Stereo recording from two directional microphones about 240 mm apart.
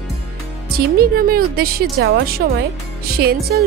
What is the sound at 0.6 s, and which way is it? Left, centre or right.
Speech, right.